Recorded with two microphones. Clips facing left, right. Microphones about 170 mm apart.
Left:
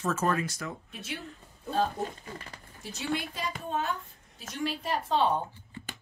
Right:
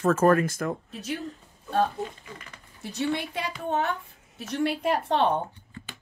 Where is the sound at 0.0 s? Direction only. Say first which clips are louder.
Right 8 dB; 55° right (ahead or behind); by 1.3 s 40° right (ahead or behind).